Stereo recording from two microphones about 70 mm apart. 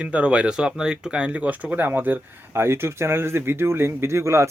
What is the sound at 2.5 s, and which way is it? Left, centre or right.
Speech, right.